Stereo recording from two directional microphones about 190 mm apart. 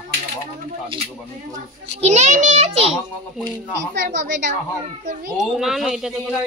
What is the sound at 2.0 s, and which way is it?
Speech, 35° right (ahead or behind).